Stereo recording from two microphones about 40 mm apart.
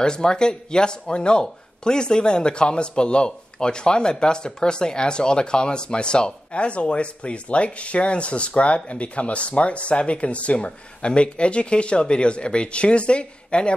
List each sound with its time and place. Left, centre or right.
0.0 s speech: centre